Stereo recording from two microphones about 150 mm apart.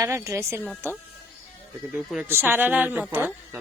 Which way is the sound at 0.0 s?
20° right (ahead or behind).